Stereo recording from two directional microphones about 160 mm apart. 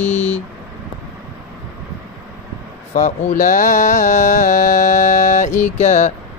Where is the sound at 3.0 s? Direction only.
50° left (ahead or behind).